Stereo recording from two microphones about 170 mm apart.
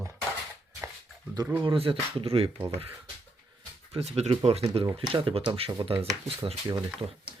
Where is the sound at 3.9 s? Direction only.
35° right (ahead or behind).